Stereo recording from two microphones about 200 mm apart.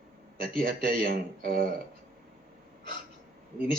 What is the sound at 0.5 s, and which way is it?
Speech, 45° right (ahead or behind).